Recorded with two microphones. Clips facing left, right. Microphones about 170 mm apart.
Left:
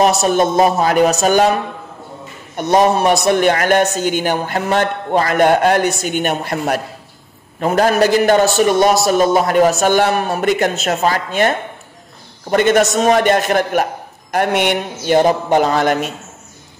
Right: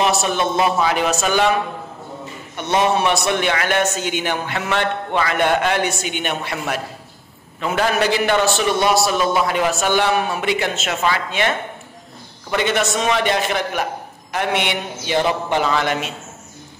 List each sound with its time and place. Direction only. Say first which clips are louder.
0.0 s a man's voice: left 6 dB; 40° left (ahead or behind)